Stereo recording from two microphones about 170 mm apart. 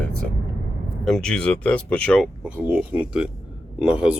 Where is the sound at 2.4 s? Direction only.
5° right (ahead or behind).